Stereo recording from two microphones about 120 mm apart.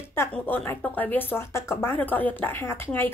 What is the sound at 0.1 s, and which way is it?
Speech, 20° left (ahead or behind).